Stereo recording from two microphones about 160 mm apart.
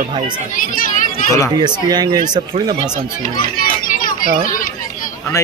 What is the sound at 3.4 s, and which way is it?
Children playing, 60° left (ahead or behind).